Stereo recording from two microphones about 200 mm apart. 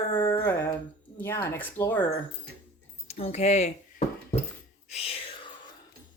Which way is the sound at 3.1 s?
35° left (ahead or behind).